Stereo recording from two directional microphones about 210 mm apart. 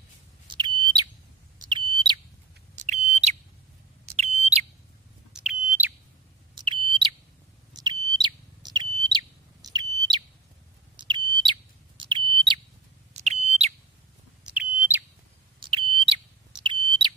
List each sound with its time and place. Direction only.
0.5 s bird: 20° right (ahead or behind)
2.7 s smoke detector: 35° right (ahead or behind)
5.3 s smoke detector: 5° right (ahead or behind)
6.5 s bird: 25° right (ahead or behind)
7.7 s chirp: 20° right (ahead or behind)
11.0 s bird: 20° right (ahead or behind)
12.0 s smoke detector: 25° right (ahead or behind)
13.1 s bird: 30° right (ahead or behind)
14.4 s bird: 5° right (ahead or behind)
15.6 s smoke detector: 25° right (ahead or behind)